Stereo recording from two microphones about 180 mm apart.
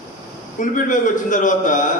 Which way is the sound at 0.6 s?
45° left (ahead or behind).